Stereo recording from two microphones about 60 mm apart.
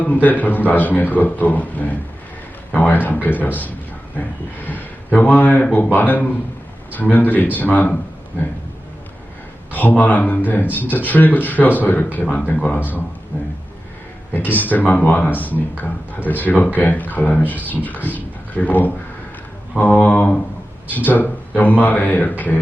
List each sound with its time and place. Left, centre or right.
0.0 s a man's voice: left
9.7 s a man's voice: left
14.3 s a man's voice: left